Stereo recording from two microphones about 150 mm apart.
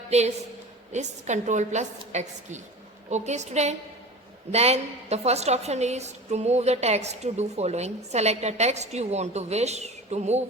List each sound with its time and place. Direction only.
0.9 s a woman's voice: 50° right (ahead or behind)